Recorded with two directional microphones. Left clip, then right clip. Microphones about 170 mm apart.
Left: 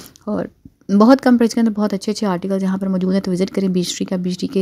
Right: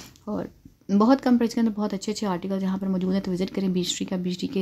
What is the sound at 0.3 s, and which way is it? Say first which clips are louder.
Speech: left 8 dB; 35° left (ahead or behind).